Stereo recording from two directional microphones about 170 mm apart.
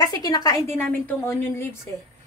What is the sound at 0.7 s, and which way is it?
A woman's voice, 10° left (ahead or behind).